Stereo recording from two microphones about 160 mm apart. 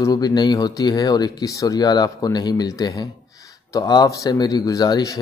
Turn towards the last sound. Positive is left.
turn(degrees=20)  # may be behind; listen again after turning